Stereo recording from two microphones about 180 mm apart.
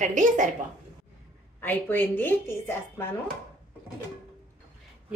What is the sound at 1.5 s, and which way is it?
A woman's voice, 10° left (ahead or behind).